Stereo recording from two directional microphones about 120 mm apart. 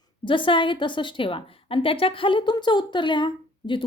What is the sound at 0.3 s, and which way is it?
A woman's voice, 45° left (ahead or behind).